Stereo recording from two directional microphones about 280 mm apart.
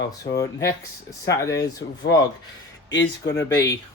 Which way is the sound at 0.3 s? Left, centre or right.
Left.